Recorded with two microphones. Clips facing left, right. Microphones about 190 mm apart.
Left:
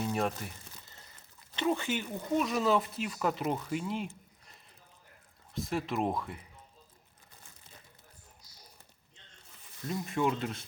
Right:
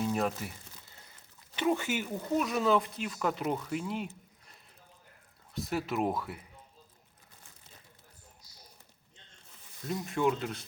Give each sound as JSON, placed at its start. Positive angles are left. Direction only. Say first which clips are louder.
{"t": 0.0, "sound": "speech", "louder": "right 1 dB", "side_deg": 0}
{"t": 1.5, "sound": "speech", "louder": "right 1 dB", "side_deg": -10}
{"t": 5.5, "sound": "speech", "louder": "right 1 dB", "side_deg": 0}
{"t": 9.8, "sound": "speech", "louder": "right 1 dB", "side_deg": 0}